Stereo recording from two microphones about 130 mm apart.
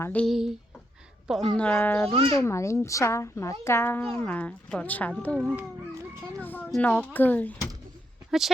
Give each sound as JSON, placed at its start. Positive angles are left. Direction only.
{"t": 0.0, "sound": "speech", "side_deg": 10}
{"t": 0.3, "sound": "speech", "side_deg": -5}
{"t": 2.0, "sound": "a child's voice", "side_deg": -45}
{"t": 2.3, "sound": "a child's voice", "side_deg": 20}
{"t": 5.4, "sound": "speech", "side_deg": -5}
{"t": 6.4, "sound": "speech", "side_deg": 15}
{"t": 8.3, "sound": "speech", "side_deg": 0}